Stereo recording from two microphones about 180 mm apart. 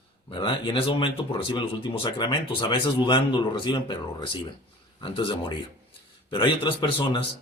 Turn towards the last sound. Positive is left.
turn(degrees=25)  # may be behind; listen again after turning